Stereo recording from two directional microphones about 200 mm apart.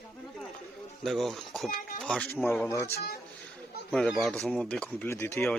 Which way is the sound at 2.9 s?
50° left (ahead or behind).